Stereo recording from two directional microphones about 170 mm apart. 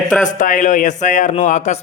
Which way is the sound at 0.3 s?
45° left (ahead or behind).